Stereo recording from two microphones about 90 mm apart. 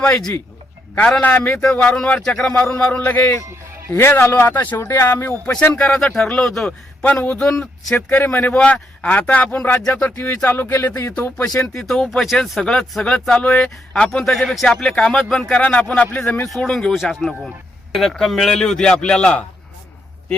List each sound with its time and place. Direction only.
0.0 s speech: 10° left (ahead or behind)
3.9 s speech: 25° left (ahead or behind)
4.8 s speech: 30° left (ahead or behind)
5.7 s speech: 10° left (ahead or behind)
6.7 s speech: 15° left (ahead or behind)
7.9 s speech: 20° left (ahead or behind)
11.6 s speech: 10° left (ahead or behind)
16.6 s speech: 5° left (ahead or behind)